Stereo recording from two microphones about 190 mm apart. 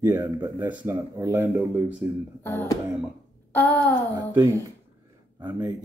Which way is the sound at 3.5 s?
10° left (ahead or behind).